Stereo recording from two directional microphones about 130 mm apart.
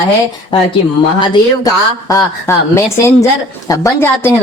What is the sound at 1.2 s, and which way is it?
Speech, 35° left (ahead or behind).